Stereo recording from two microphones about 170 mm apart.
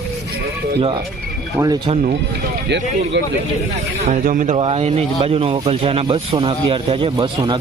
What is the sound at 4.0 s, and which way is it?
Speech, 45° right (ahead or behind).